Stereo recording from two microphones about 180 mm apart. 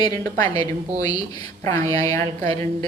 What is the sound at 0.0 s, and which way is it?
Speech, 20° left (ahead or behind).